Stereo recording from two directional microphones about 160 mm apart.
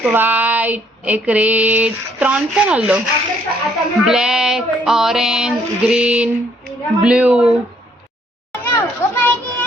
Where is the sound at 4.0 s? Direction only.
5° right (ahead or behind).